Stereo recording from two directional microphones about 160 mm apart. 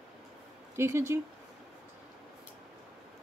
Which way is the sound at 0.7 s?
15° right (ahead or behind).